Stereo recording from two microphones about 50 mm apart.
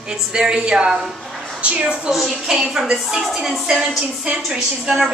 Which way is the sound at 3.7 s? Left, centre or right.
Right.